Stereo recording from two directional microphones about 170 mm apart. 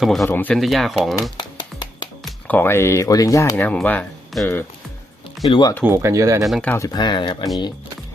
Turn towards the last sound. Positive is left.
turn(degrees=25)  # may be behind; listen again after turning